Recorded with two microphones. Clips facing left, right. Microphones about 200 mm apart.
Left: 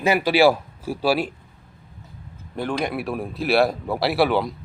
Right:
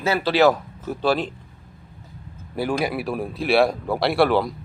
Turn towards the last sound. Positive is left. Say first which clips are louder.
# right 1 dB
turn(degrees=0)  # may be behind; listen again after turning